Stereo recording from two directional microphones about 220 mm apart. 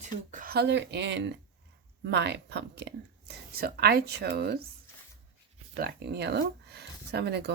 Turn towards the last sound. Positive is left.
turn(degrees=-50)  # may be behind; listen again after turning